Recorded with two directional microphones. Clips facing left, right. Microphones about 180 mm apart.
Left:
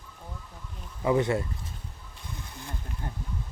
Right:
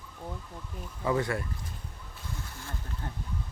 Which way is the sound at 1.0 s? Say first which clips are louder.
Left 4 dB; 20° left (ahead or behind).